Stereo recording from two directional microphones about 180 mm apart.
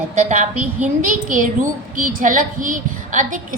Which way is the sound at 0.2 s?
40° right (ahead or behind).